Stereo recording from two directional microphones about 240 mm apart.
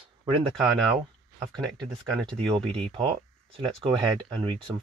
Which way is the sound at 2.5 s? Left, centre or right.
Right.